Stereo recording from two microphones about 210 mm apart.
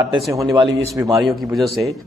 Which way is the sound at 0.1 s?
15° right (ahead or behind).